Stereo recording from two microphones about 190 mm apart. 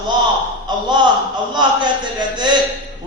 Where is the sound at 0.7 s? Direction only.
20° right (ahead or behind).